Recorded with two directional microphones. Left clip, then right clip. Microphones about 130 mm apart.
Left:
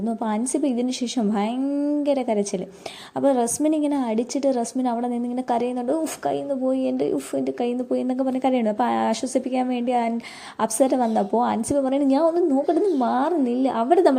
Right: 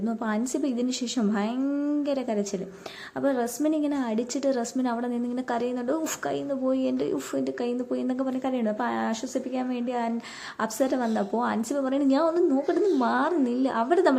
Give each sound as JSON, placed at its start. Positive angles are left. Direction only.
{"t": 0.3, "sound": "a woman's voice", "side_deg": 25}
{"t": 8.4, "sound": "a woman's voice", "side_deg": 40}